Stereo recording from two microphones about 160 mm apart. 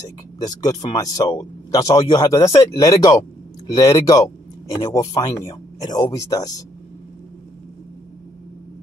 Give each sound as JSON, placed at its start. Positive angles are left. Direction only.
{"t": 0.4, "sound": "speech", "side_deg": 20}